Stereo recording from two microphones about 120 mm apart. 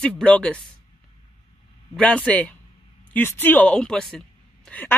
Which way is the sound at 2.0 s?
10° left (ahead or behind).